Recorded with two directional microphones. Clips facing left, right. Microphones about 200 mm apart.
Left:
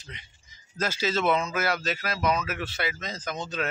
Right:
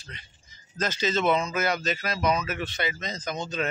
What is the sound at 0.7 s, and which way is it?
Speech, 5° left (ahead or behind).